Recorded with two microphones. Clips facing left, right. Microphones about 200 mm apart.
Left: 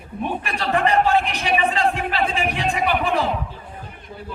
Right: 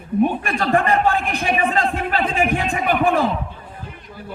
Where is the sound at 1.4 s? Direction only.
45° right (ahead or behind).